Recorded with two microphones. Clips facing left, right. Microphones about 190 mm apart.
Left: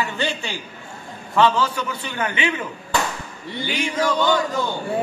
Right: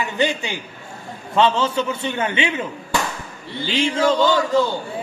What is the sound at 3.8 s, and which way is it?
Speech, 25° right (ahead or behind).